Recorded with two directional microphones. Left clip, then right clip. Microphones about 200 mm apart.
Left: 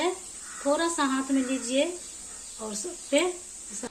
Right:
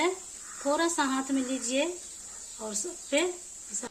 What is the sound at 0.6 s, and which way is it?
A woman's voice, 30° right (ahead or behind).